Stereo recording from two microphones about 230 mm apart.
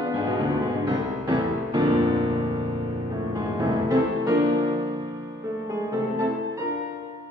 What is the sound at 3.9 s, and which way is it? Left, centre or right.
Music, centre.